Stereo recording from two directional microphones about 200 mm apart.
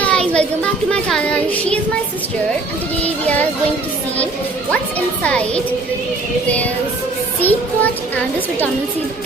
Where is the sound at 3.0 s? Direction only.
5° left (ahead or behind).